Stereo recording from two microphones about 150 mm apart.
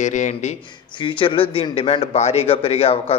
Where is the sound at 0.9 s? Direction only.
35° left (ahead or behind).